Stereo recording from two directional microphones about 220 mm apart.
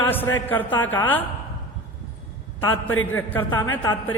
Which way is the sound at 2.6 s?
10° left (ahead or behind).